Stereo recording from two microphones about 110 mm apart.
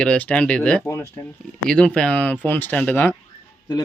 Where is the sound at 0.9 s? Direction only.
20° left (ahead or behind).